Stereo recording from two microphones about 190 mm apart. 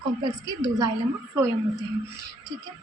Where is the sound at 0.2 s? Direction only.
20° right (ahead or behind).